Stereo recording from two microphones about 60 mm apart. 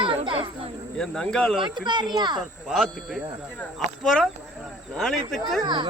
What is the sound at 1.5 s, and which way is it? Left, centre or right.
Speech, centre.